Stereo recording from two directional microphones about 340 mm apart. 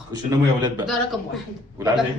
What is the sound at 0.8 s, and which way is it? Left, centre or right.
A woman's voice, centre.